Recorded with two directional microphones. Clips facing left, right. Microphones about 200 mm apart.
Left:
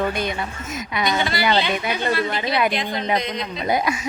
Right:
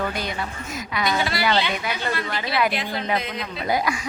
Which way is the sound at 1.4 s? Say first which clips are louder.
Left 4 dB; 20° left (ahead or behind).